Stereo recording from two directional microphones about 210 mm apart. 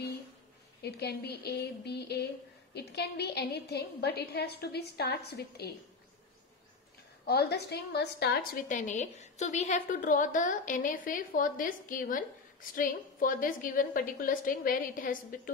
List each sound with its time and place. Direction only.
0.8 s a woman's voice: 50° left (ahead or behind)
7.2 s a woman's voice: 50° left (ahead or behind)